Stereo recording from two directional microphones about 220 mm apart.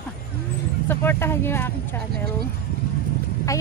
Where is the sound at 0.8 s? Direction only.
10° left (ahead or behind).